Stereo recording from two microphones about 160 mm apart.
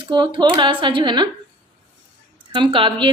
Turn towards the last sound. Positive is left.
turn(degrees=-30)  # may be behind; listen again after turning